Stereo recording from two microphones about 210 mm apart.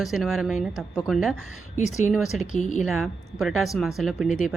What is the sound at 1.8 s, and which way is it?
Speech, 35° left (ahead or behind).